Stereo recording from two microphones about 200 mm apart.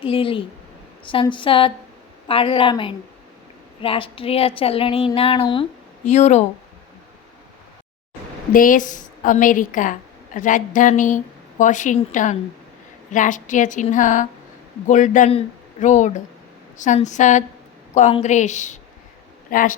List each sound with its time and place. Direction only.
0.0 s a woman's voice: 25° left (ahead or behind)
8.5 s a woman's voice: 40° left (ahead or behind)